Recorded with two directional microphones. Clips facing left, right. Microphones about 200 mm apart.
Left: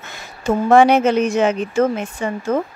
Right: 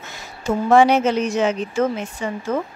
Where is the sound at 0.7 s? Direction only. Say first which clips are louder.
Left 2 dB; 55° left (ahead or behind).